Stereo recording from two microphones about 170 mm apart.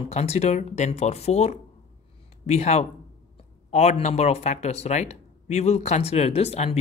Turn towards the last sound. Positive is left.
turn(degrees=40)  # may be behind; listen again after turning